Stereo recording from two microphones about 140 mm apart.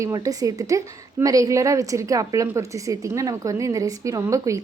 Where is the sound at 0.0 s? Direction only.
25° right (ahead or behind).